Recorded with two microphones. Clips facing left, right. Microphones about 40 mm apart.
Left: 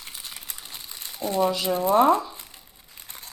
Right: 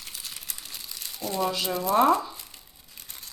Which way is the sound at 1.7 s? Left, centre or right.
Left.